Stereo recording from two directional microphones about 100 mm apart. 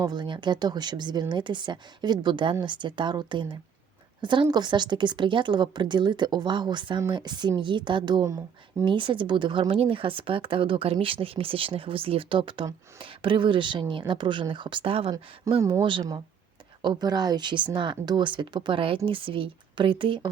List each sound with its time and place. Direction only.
0.0 s a woman's voice: 50° right (ahead or behind); by 15.1 s 65° right (ahead or behind)
15.5 s speech: 35° right (ahead or behind)
15.8 s speech: 55° right (ahead or behind)
16.8 s speech: 45° right (ahead or behind)